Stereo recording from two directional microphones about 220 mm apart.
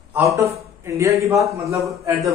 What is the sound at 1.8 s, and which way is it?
Speech, centre (ahead or behind).